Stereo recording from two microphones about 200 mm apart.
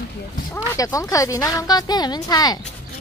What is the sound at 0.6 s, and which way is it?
Speech, 15° left (ahead or behind).